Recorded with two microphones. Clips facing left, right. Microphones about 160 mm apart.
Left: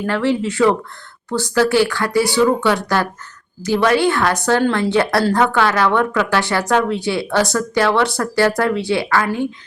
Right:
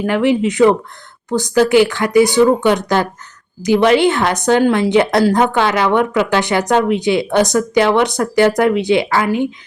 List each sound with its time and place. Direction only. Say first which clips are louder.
0.0 s a woman's voice: right 4 dB; 15° right (ahead or behind)